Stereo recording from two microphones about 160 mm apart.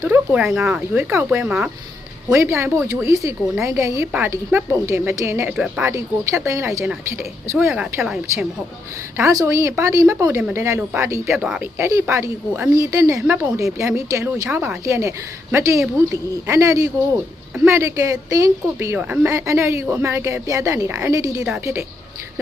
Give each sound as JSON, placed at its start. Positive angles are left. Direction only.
{"t": 0.0, "sound": "speech", "side_deg": -10}
{"t": 2.3, "sound": "speech", "side_deg": -15}
{"t": 5.5, "sound": "speech", "side_deg": -5}
{"t": 5.9, "sound": "speech", "side_deg": -20}
{"t": 8.0, "sound": "speech", "side_deg": -5}
{"t": 9.1, "sound": "speech", "side_deg": -20}
{"t": 11.4, "sound": "speech", "side_deg": -5}
{"t": 11.8, "sound": "speech", "side_deg": -20}